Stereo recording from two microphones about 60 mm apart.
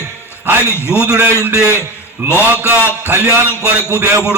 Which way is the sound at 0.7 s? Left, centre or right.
Left.